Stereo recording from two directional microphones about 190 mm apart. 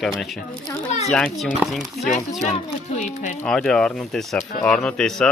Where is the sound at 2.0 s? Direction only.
40° left (ahead or behind).